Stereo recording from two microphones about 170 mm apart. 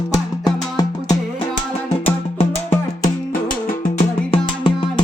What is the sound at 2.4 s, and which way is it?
Music, 40° left (ahead or behind).